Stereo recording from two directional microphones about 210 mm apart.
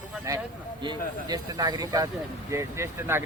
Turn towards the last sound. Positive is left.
turn(degrees=-10)  # may be behind; listen again after turning